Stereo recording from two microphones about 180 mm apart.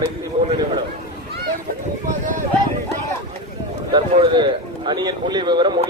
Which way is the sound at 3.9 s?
30° right (ahead or behind).